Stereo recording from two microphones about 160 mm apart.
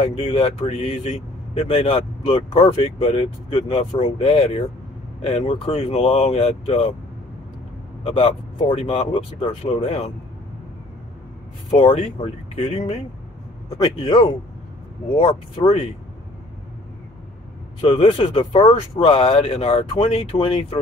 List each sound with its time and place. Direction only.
0.0 s speech: 30° left (ahead or behind)
8.0 s speech: 35° left (ahead or behind)
11.8 s speech: 40° left (ahead or behind)
13.7 s a man's voice: 25° left (ahead or behind)
17.7 s speech: 30° left (ahead or behind)